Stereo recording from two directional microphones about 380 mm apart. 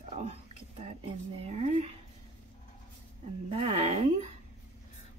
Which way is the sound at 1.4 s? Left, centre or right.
Centre.